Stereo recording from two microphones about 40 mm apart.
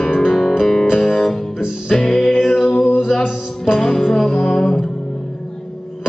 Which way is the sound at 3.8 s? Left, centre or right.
Centre.